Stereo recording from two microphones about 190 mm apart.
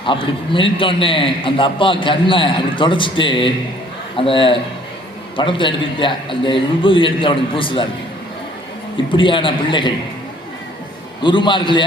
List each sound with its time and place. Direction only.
0.0 s a man's voice: 25° left (ahead or behind)
9.1 s a man's voice: 25° left (ahead or behind)
11.2 s a man's voice: 25° left (ahead or behind)